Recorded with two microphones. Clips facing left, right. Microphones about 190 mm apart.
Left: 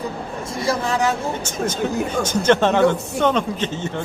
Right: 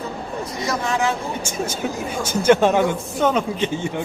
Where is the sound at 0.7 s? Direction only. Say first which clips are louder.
Left 2 dB; 35° left (ahead or behind).